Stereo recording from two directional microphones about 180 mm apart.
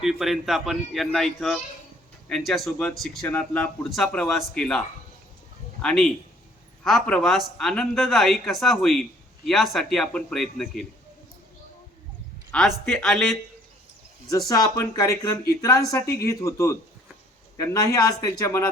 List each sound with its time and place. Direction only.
0.0 s speech: centre (ahead or behind)
5.8 s speech: 5° left (ahead or behind)
12.5 s speech: 5° left (ahead or behind)
14.3 s speech: 20° left (ahead or behind)